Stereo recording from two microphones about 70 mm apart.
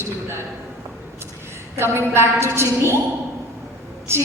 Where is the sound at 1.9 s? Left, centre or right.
Right.